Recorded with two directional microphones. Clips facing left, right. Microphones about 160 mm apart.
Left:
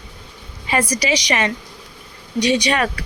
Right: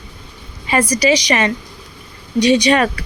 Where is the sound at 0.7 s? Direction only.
40° right (ahead or behind).